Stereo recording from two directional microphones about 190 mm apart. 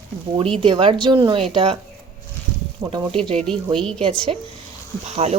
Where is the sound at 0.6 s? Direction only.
25° right (ahead or behind).